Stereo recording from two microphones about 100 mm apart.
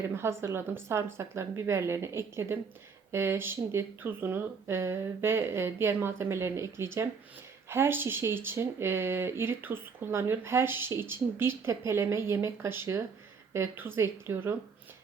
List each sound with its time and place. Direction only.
0.1 s speech: 25° right (ahead or behind)